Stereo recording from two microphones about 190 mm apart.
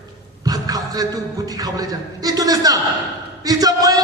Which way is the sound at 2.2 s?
20° right (ahead or behind).